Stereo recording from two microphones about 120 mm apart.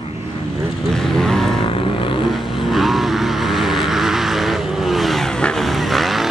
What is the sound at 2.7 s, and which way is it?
Vehicle, centre (ahead or behind).